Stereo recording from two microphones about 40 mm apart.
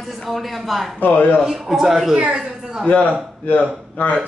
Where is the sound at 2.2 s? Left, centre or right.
Right.